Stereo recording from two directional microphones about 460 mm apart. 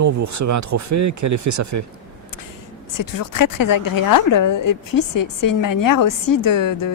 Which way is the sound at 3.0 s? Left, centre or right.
Left.